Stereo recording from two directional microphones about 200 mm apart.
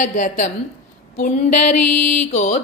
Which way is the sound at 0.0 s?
40° left (ahead or behind).